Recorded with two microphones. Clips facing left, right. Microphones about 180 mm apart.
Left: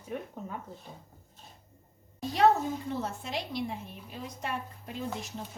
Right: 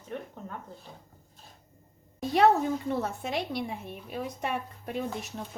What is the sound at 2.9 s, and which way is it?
Speech, 60° right (ahead or behind).